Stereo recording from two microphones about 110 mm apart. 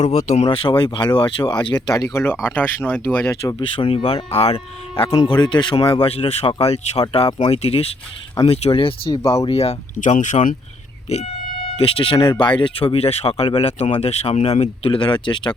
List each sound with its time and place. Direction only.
0.0 s speech: 80° left
0.5 s speech: 55° left (ahead or behind); by 3.3 s 20° left (ahead or behind)
3.8 s speech: 55° left (ahead or behind)
5.2 s speech: 45° left (ahead or behind)
6.1 s speech: 60° left (ahead or behind)
9.5 s speech: 70° left (ahead or behind); by 10.4 s 90° left
11.8 s speech: 55° left (ahead or behind)